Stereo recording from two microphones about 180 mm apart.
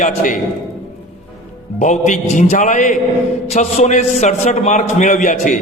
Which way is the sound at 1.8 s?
40° left (ahead or behind).